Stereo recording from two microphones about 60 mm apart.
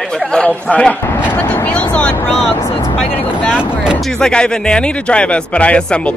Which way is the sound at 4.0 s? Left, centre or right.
Centre.